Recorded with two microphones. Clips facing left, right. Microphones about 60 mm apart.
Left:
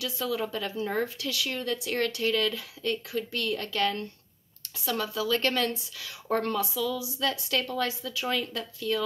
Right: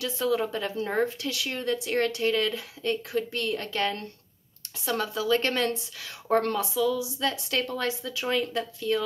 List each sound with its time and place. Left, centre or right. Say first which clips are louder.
0.0 s speech: right 4 dB; right